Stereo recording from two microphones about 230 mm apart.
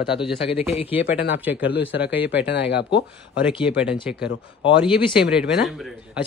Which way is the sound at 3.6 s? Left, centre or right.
Centre.